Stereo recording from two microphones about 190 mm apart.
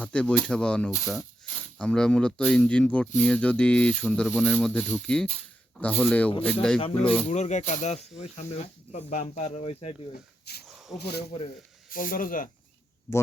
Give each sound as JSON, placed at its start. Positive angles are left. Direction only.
{"t": 0.0, "sound": "speech", "side_deg": 5}
{"t": 7.3, "sound": "speech", "side_deg": 35}
{"t": 10.7, "sound": "a sound", "side_deg": 0}
{"t": 10.9, "sound": "speech", "side_deg": 60}
{"t": 11.9, "sound": "speech", "side_deg": 45}